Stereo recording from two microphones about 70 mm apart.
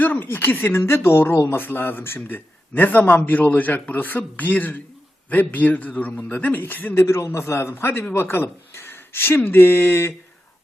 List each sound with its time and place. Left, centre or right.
0.0 s speech: left
6.9 s a man's voice: left